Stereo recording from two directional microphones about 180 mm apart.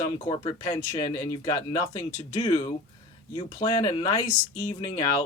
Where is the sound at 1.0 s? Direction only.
20° left (ahead or behind).